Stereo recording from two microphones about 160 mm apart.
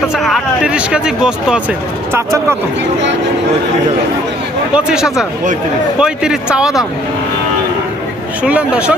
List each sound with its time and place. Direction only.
0.2 s speech: centre (ahead or behind)
2.1 s speech: 15° right (ahead or behind)
4.7 s speech: 5° right (ahead or behind)
8.4 s speech: 10° right (ahead or behind)